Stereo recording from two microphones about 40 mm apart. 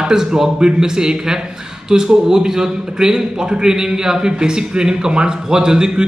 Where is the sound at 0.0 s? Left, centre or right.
Centre.